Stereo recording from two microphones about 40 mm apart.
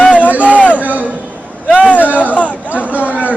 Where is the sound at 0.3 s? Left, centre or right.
Right.